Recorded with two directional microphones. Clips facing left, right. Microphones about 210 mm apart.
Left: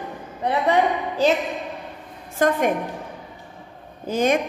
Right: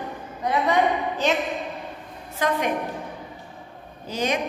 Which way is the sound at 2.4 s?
50° left (ahead or behind).